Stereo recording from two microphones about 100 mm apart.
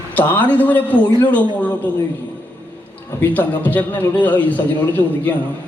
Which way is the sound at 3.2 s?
20° left (ahead or behind).